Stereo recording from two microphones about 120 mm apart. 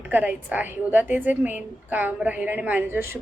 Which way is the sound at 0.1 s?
15° right (ahead or behind).